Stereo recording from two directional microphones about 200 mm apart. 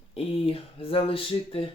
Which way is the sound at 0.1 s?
30° left (ahead or behind).